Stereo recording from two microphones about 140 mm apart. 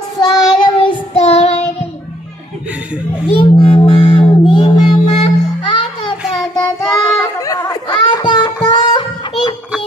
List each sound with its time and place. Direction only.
0.2 s child singing: 30° left (ahead or behind)
1.1 s child singing: 45° left (ahead or behind)
3.3 s music: 40° left (ahead or behind)
6.2 s child singing: 5° left (ahead or behind)
6.9 s a sound: 25° left (ahead or behind)
8.6 s music: 30° left (ahead or behind)